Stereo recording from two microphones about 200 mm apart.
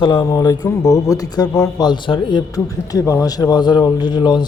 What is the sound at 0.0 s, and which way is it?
Speech, 20° left (ahead or behind).